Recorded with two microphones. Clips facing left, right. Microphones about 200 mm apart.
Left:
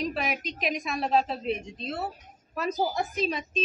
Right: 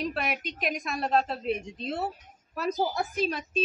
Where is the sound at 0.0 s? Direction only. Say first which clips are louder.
Left 1 dB; centre (ahead or behind).